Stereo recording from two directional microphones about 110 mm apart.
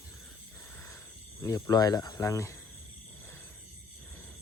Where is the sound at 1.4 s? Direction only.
30° left (ahead or behind).